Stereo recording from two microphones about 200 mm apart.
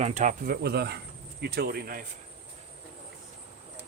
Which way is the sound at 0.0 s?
35° right (ahead or behind).